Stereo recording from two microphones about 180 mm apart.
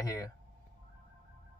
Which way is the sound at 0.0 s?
20° left (ahead or behind).